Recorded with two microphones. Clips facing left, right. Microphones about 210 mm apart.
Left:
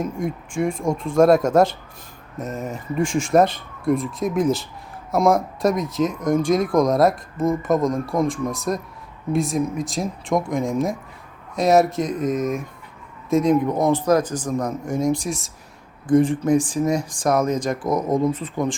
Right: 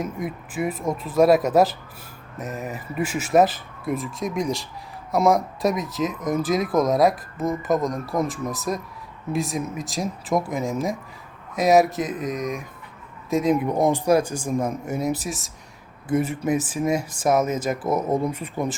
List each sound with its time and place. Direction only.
0.0 s a man's voice: 5° right (ahead or behind)